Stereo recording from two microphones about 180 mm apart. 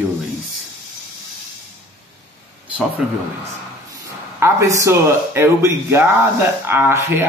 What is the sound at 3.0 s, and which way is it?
Speech, 5° right (ahead or behind).